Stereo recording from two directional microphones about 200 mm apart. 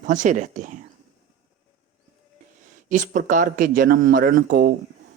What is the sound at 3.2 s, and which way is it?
A man's voice, 40° right (ahead or behind).